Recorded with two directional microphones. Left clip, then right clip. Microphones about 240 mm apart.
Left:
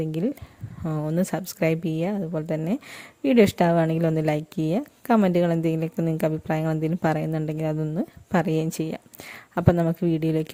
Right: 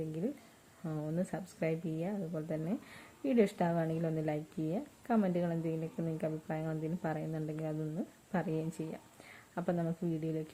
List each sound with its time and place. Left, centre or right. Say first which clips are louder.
0.9 s a woman's voice: left 12 dB; left